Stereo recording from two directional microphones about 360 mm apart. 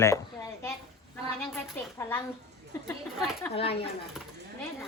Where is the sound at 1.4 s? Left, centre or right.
Centre.